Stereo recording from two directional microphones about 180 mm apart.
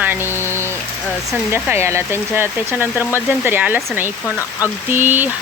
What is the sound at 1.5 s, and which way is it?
Speech, 15° right (ahead or behind).